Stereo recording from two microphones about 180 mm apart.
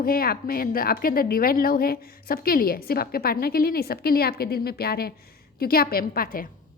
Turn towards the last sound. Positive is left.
turn(degrees=50)  # may be behind; listen again after turning